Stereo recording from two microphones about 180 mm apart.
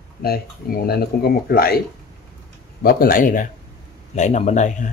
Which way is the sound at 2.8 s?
55° left (ahead or behind).